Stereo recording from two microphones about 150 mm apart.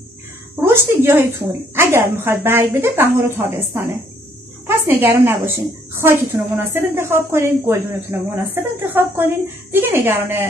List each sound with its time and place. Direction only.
0.6 s a woman's voice: 15° right (ahead or behind)